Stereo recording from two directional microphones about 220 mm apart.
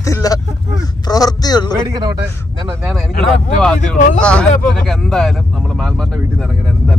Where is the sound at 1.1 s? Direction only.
15° left (ahead or behind).